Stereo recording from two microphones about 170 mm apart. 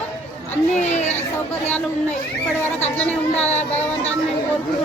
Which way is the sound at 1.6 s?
10° left (ahead or behind).